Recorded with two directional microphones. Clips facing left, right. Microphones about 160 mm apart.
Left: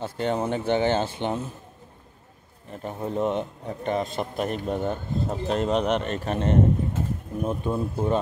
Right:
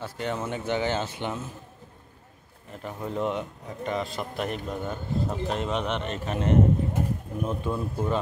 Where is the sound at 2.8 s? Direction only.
30° left (ahead or behind).